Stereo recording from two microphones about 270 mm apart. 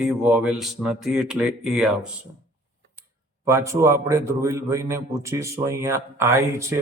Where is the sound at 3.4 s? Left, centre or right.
Centre.